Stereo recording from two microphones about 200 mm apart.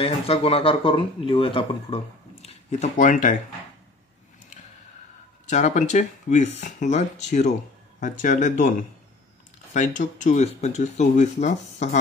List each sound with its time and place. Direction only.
0.0 s speech: 30° left (ahead or behind)
5.5 s speech: 35° left (ahead or behind)
9.8 s speech: 40° left (ahead or behind)